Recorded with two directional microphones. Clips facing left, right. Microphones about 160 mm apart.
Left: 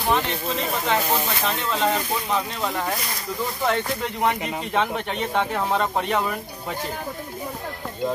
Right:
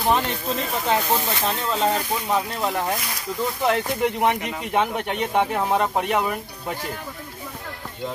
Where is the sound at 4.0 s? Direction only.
20° right (ahead or behind).